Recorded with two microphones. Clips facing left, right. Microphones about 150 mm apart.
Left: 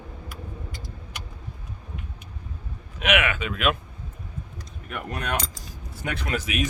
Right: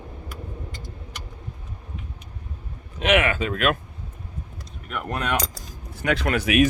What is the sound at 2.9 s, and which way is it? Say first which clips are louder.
Speech: right 4 dB; 30° right (ahead or behind).